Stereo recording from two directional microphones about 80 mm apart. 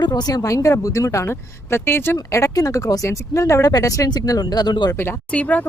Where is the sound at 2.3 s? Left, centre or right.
Left.